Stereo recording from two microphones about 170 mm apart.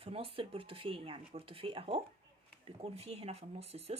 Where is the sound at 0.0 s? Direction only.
35° right (ahead or behind).